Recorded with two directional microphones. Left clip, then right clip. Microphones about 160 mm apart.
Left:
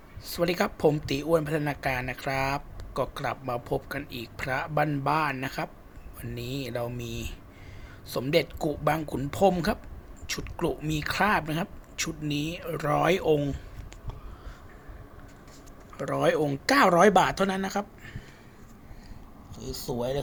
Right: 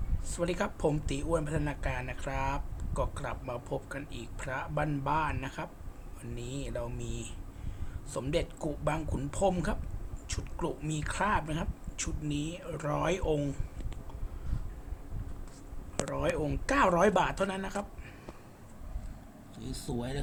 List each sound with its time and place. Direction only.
0.3 s speech: 35° left (ahead or behind)
16.0 s speech: 35° left (ahead or behind)
19.9 s speech: 25° left (ahead or behind)